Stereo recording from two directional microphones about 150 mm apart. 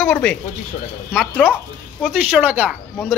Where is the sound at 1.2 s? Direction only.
Centre (ahead or behind).